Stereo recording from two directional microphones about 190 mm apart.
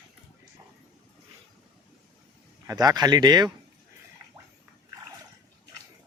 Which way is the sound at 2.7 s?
20° right (ahead or behind).